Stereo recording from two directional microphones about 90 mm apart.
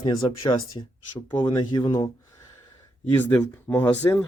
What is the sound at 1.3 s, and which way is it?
Speech, 55° left (ahead or behind).